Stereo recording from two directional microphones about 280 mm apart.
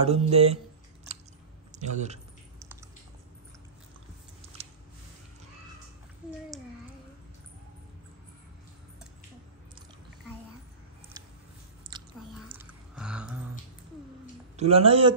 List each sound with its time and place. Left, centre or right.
0.0 s speech: right
1.7 s speech: right
11.9 s chewing: centre
12.4 s a sound: centre
14.6 s speech: right